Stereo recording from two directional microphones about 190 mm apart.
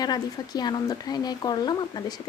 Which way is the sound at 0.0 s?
20° left (ahead or behind).